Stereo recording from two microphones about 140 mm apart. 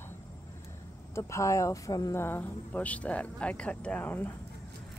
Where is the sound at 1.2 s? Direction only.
20° left (ahead or behind).